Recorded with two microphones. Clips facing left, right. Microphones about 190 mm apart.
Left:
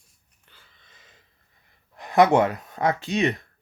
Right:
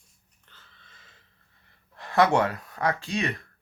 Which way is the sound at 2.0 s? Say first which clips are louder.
Left 4 dB; 15° left (ahead or behind).